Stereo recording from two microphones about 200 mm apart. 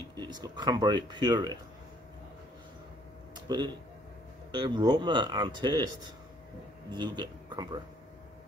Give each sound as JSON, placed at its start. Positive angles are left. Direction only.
{"t": 0.1, "sound": "speech", "side_deg": -20}
{"t": 3.3, "sound": "speech", "side_deg": -20}
{"t": 6.9, "sound": "a man's voice", "side_deg": -20}